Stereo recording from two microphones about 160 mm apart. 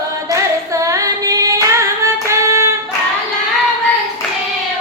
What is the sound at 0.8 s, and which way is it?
Female singing, 20° right (ahead or behind).